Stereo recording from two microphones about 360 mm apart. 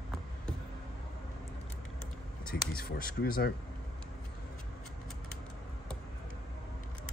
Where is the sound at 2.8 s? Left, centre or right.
Left.